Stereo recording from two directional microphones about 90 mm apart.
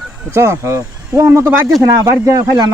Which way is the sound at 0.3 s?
30° right (ahead or behind).